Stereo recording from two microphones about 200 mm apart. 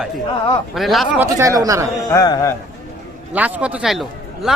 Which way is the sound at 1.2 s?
15° right (ahead or behind).